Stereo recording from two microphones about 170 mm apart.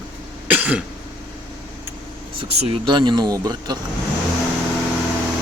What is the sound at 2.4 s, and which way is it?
Speech, 30° right (ahead or behind).